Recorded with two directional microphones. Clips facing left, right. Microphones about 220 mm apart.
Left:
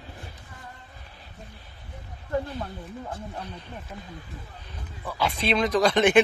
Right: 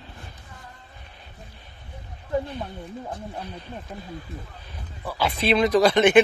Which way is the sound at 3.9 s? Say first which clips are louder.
Right 2 dB; 20° right (ahead or behind).